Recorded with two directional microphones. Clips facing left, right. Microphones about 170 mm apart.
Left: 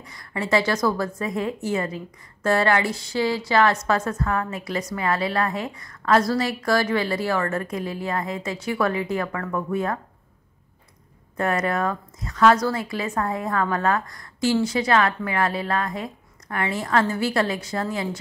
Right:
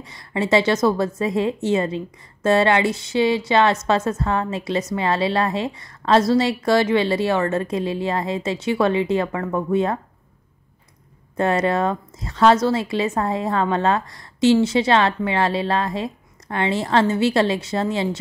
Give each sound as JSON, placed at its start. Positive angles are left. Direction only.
{"t": 0.0, "sound": "a woman's voice", "side_deg": -25}
{"t": 11.3, "sound": "a woman's voice", "side_deg": -25}